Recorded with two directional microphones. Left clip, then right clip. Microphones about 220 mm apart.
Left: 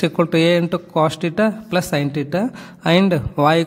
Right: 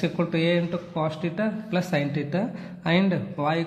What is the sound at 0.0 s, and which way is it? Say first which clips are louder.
A man's voice: left 9 dB; 45° left (ahead or behind).